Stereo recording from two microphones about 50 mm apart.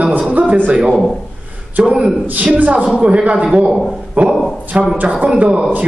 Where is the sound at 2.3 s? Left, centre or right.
Right.